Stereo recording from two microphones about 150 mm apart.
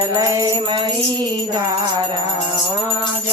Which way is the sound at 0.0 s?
20° right (ahead or behind).